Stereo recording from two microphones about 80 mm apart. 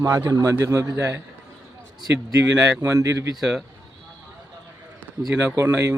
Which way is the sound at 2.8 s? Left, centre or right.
Right.